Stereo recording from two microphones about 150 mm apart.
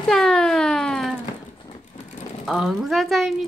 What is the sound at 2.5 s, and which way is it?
Speech, centre (ahead or behind).